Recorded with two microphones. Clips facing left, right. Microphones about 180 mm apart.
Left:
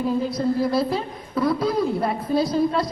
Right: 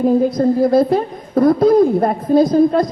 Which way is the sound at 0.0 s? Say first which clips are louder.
Right 9 dB; 50° right (ahead or behind).